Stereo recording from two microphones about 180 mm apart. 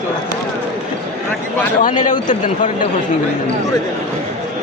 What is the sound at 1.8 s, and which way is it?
Speech, 45° left (ahead or behind).